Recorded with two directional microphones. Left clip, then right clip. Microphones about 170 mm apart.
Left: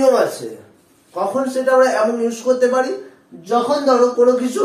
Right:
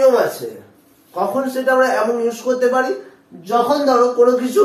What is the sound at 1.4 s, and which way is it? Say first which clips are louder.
A man's voice: left 2 dB; 10° left (ahead or behind).